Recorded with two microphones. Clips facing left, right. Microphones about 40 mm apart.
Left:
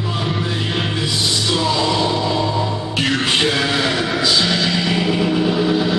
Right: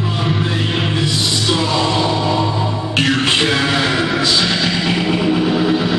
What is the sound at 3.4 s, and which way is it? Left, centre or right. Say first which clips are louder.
Music: right 2 dB; right.